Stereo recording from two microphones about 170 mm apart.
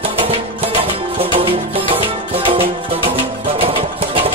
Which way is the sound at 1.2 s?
35° right (ahead or behind).